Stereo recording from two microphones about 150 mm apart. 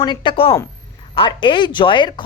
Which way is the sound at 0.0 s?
35° left (ahead or behind).